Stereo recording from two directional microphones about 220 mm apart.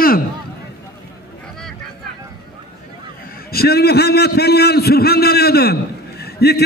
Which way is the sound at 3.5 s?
45° left (ahead or behind).